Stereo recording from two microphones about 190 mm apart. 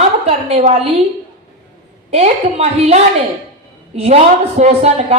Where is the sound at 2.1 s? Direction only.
35° right (ahead or behind).